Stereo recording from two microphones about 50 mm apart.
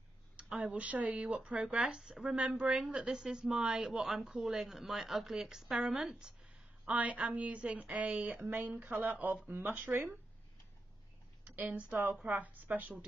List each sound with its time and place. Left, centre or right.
0.4 s speech: right
6.9 s speech: right
11.4 s a sound: right
11.7 s speech: right